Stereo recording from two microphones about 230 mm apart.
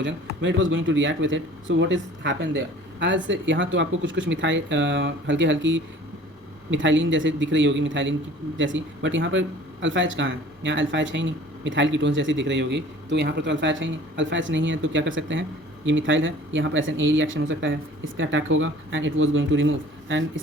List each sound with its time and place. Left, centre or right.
0.0 s speech: right